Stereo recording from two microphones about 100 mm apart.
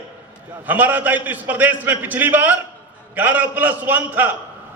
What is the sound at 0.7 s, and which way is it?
A man's voice, 15° right (ahead or behind).